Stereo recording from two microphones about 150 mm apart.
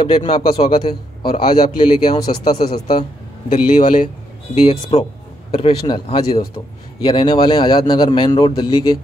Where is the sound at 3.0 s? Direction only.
55° left (ahead or behind); by 8.8 s 35° left (ahead or behind).